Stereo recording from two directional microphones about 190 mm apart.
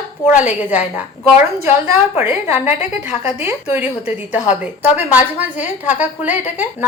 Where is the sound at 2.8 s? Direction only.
35° left (ahead or behind).